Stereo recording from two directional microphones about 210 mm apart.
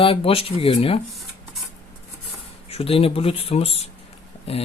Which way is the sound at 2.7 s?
25° left (ahead or behind).